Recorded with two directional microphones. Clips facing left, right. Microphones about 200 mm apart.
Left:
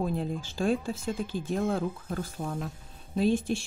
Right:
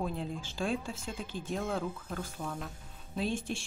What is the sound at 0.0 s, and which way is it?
Speech, 40° left (ahead or behind).